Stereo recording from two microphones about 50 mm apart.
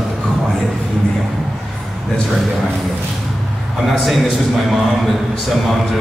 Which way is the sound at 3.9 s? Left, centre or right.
Centre.